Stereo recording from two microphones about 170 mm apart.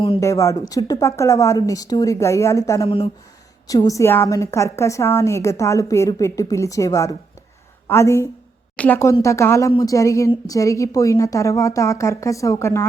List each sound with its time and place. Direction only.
0.2 s a woman's voice: 15° left (ahead or behind)